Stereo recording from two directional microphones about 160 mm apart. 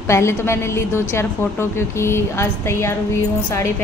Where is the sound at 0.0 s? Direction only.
15° left (ahead or behind).